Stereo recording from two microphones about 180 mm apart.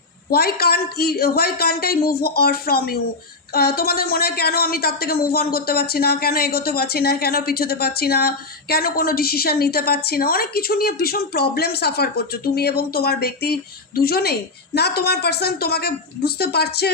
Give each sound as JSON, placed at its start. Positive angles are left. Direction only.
{"t": 0.3, "sound": "a woman's voice", "side_deg": 60}